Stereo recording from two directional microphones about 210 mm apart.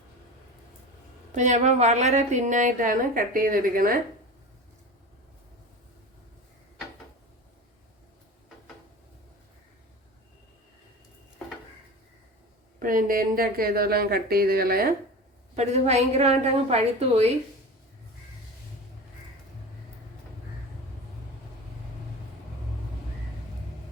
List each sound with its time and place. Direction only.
1.4 s a woman's voice: 35° right (ahead or behind)
12.8 s speech: 40° right (ahead or behind)
15.5 s a woman's voice: 30° right (ahead or behind)